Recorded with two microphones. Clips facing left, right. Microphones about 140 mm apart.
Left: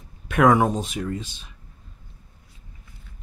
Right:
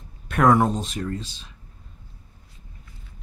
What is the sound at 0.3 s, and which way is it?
Speech, 10° left (ahead or behind).